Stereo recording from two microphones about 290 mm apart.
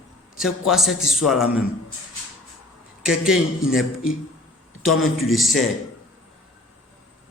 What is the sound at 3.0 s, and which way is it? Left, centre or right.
A man's voice, centre.